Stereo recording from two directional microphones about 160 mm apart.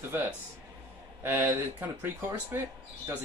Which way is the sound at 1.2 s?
15° right (ahead or behind).